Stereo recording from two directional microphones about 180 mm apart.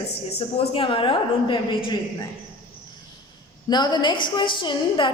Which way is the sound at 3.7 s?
25° left (ahead or behind).